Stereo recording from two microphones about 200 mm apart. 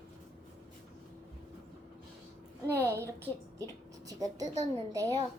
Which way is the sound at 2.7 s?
15° right (ahead or behind).